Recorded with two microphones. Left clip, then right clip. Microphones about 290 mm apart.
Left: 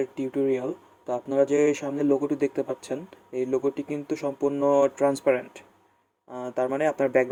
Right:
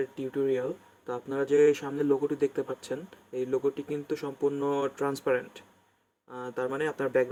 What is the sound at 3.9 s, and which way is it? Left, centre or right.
Speech, centre.